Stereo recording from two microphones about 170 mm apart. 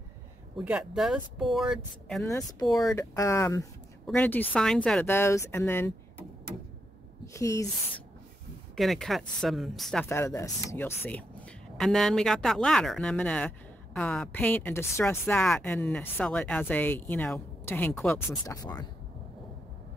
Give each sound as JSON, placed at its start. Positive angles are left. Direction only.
{"t": 0.6, "sound": "speech", "side_deg": -5}
{"t": 2.2, "sound": "speech", "side_deg": 20}
{"t": 7.3, "sound": "speech", "side_deg": 15}
{"t": 8.7, "sound": "speech", "side_deg": 0}
{"t": 10.0, "sound": "speech", "side_deg": 15}